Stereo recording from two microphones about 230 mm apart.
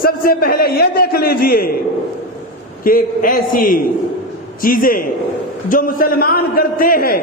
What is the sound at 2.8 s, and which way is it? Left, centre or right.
A man's voice, left.